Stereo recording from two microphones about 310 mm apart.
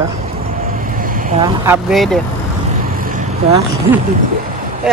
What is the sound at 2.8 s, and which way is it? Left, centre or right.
Vehicle, right.